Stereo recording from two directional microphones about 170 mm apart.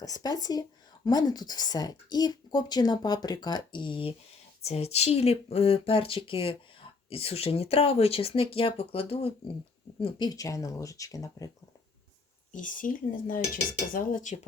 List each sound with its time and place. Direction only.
0.0 s speech: 20° left (ahead or behind)
12.5 s cutlery: 50° left (ahead or behind)